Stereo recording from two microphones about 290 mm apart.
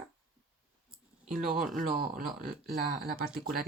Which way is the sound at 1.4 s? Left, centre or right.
Centre.